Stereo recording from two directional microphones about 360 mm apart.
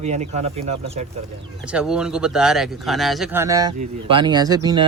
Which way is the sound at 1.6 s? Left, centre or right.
Centre.